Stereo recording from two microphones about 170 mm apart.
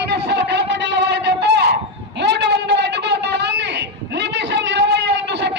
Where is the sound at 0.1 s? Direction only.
85° right.